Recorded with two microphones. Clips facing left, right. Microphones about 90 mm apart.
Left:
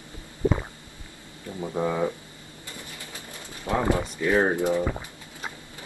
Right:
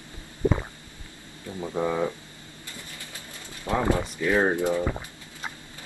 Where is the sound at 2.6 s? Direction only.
20° left (ahead or behind).